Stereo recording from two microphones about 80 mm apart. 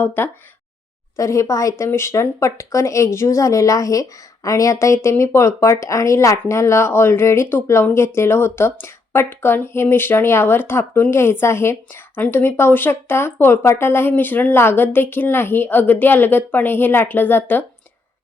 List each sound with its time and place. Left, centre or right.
0.0 s speech: left
1.1 s speech: left
1.9 s speech: left